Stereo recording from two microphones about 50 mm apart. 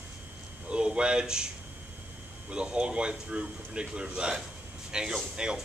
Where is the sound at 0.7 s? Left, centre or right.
Centre.